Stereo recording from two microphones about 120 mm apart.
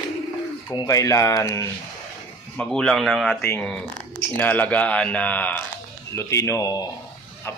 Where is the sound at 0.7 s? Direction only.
30° left (ahead or behind).